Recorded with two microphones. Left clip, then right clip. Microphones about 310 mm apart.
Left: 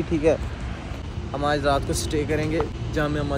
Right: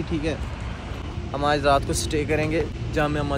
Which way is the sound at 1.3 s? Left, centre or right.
Centre.